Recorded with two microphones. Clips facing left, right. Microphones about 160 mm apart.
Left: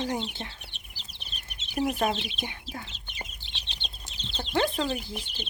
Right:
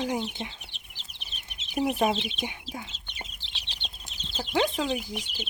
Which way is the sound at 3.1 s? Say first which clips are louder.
Left 1 dB; centre (ahead or behind).